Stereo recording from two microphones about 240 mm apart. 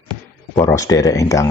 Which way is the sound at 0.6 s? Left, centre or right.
Centre.